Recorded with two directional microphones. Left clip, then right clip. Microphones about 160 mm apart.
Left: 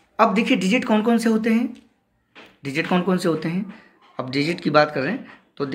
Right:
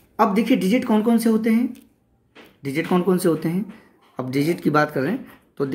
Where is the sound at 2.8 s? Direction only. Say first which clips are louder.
Right 1 dB; 30° right (ahead or behind).